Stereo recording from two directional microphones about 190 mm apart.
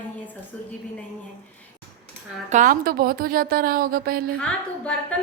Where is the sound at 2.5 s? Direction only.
45° right (ahead or behind).